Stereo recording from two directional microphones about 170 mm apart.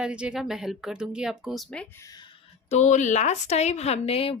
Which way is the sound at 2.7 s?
45° left (ahead or behind).